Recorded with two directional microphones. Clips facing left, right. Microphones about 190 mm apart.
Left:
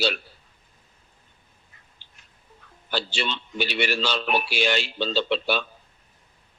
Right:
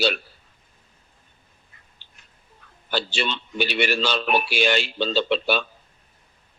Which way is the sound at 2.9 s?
55° right (ahead or behind).